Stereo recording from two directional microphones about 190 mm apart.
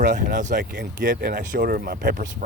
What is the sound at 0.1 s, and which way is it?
Speech, 45° right (ahead or behind).